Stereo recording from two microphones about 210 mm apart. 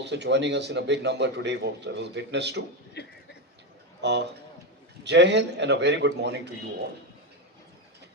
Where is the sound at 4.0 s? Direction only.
55° right (ahead or behind).